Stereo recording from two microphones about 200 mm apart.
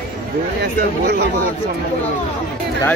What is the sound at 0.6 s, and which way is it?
Speech, 55° right (ahead or behind).